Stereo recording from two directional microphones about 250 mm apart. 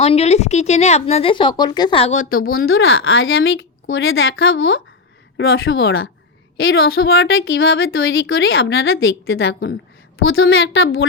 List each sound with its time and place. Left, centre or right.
0.0 s speech: left
2.6 s speech: left